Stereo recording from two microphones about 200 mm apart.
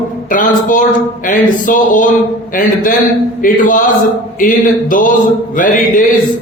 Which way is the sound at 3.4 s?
40° left (ahead or behind).